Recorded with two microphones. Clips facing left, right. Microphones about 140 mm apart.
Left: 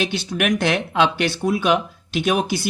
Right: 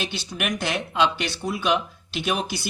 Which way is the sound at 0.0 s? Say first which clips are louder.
Left 7 dB; 55° left (ahead or behind).